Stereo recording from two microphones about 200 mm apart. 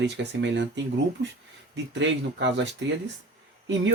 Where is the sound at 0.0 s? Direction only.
60° right (ahead or behind).